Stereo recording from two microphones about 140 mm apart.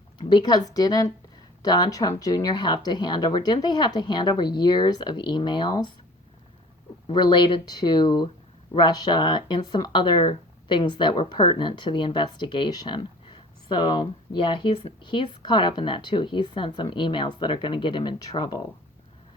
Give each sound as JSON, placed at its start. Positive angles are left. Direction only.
{"t": 0.2, "sound": "a woman's voice", "side_deg": 35}
{"t": 7.1, "sound": "speech", "side_deg": 30}